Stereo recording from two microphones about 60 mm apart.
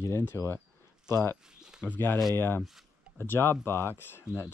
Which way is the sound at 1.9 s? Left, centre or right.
Left.